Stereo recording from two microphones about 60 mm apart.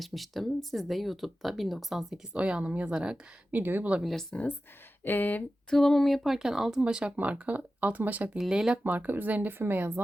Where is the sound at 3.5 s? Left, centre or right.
Right.